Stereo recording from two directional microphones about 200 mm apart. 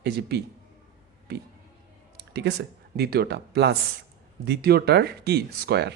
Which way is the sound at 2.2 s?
55° right (ahead or behind).